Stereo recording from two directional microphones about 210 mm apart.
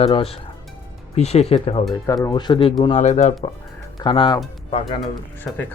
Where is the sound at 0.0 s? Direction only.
25° left (ahead or behind).